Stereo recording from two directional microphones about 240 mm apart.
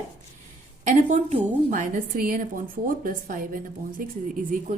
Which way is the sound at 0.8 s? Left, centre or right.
Right.